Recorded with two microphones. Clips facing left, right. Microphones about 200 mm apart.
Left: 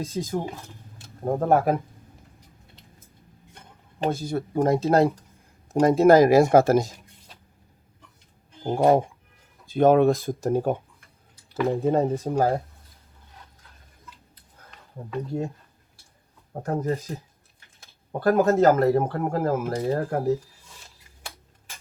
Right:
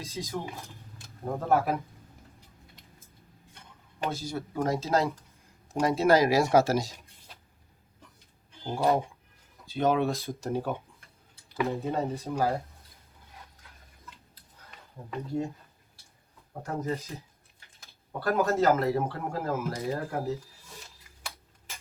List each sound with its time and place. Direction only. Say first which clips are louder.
0.0 s speech: left 7 dB; 50° left (ahead or behind)
4.1 s speech: left 7 dB; 55° left (ahead or behind)
8.6 s speech: left 7 dB; 50° left (ahead or behind)
11.8 s speech: left 8 dB; 50° left (ahead or behind)
16.5 s speech: left 6 dB; 45° left (ahead or behind)